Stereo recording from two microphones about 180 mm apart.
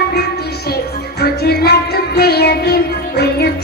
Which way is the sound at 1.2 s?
65° left (ahead or behind).